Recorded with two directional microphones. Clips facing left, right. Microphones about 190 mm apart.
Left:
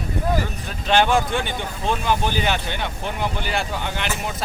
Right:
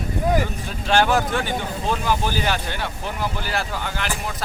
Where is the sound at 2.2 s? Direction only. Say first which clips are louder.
Left 1 dB; 20° left (ahead or behind).